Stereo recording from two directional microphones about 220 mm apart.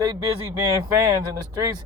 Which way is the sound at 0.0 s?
25° right (ahead or behind).